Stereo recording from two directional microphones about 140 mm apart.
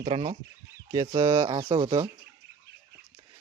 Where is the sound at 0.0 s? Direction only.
45° right (ahead or behind).